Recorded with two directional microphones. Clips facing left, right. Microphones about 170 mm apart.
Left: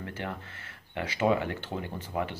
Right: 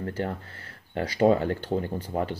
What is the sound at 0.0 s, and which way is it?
Speech, 40° right (ahead or behind).